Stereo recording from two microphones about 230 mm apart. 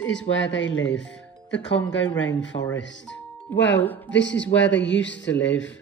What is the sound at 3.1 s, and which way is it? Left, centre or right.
Music, left.